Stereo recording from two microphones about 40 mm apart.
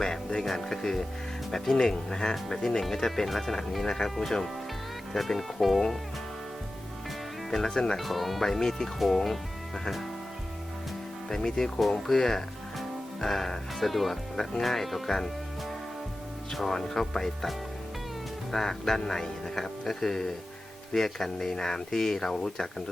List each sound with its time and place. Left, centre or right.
0.4 s speech: centre
4.1 s speech: centre
7.5 s speech: centre
7.9 s speech: centre
11.3 s speech: centre
11.8 s speech: centre
16.6 s speech: centre
18.5 s speech: centre